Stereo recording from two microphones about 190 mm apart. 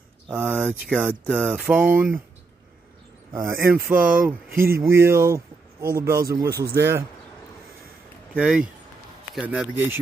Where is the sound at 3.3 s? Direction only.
15° right (ahead or behind).